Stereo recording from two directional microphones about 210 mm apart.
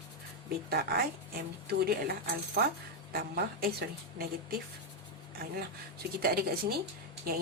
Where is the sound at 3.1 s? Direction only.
45° right (ahead or behind).